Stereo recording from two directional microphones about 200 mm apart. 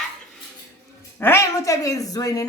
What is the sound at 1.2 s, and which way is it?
Speech, 10° left (ahead or behind).